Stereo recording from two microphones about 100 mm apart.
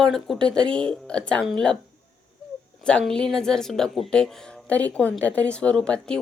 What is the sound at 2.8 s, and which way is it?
A woman's voice, 10° left (ahead or behind).